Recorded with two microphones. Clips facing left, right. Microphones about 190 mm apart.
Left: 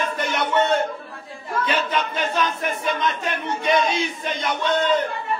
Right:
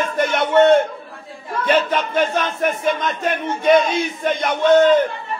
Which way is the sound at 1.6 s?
50° right (ahead or behind).